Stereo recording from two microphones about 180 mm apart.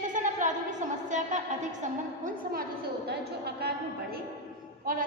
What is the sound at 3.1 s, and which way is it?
A woman's voice, 65° right (ahead or behind).